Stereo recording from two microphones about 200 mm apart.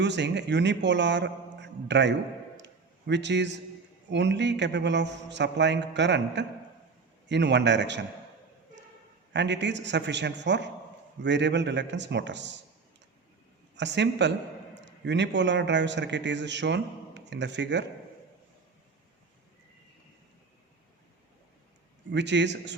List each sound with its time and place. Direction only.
0.0 s a man's voice: 60° right (ahead or behind)
9.3 s a man's voice: 60° right (ahead or behind)
13.7 s a man's voice: 60° right (ahead or behind)
22.1 s a man's voice: 60° right (ahead or behind)